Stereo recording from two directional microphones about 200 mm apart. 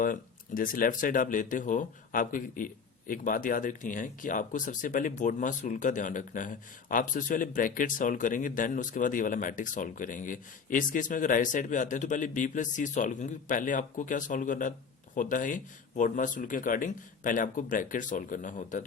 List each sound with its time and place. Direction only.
0.0 s speech: 45° left (ahead or behind)